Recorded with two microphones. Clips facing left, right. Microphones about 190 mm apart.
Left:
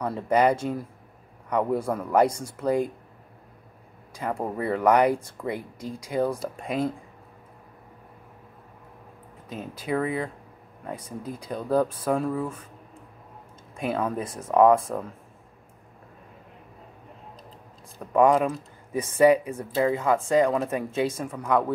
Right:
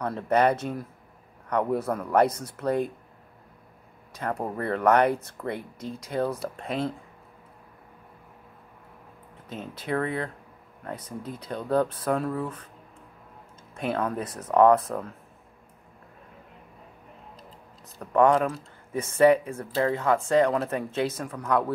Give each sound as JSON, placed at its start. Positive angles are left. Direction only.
{"t": 0.0, "sound": "speech", "side_deg": 10}
{"t": 2.2, "sound": "speech", "side_deg": 25}
{"t": 2.5, "sound": "speech", "side_deg": 10}
{"t": 4.2, "sound": "speech", "side_deg": 10}
{"t": 9.5, "sound": "speech", "side_deg": 10}
{"t": 13.7, "sound": "speech", "side_deg": 10}
{"t": 17.9, "sound": "speech", "side_deg": 10}